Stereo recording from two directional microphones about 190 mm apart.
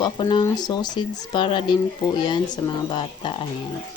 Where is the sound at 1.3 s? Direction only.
25° left (ahead or behind).